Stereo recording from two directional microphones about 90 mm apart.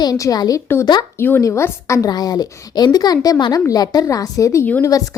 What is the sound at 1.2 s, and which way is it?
Speech, 20° left (ahead or behind).